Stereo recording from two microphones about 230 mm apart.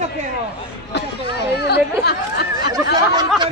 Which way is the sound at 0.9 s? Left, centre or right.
Left.